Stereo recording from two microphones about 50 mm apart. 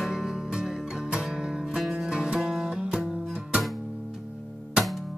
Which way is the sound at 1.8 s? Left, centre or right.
Centre.